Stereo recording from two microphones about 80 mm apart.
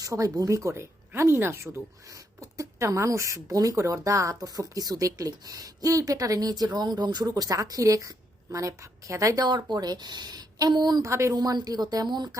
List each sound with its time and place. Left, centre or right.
0.0 s speech: right
9.5 s a woman's voice: right
11.0 s speech: right
11.3 s a woman's voice: right